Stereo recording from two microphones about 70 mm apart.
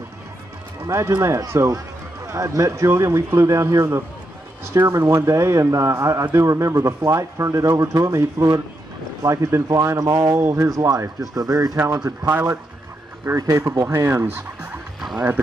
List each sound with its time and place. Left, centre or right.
0.8 s speech: right
10.8 s speech: right
12.3 s speech: right
13.4 s speech: right
14.2 s speech: right